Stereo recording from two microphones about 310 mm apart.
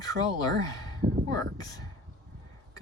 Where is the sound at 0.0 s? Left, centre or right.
Centre.